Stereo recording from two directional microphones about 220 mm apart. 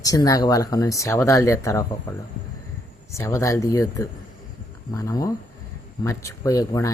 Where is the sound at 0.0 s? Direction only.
15° left (ahead or behind).